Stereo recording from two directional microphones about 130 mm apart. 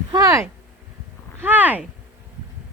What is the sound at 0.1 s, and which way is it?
Speech, 30° right (ahead or behind).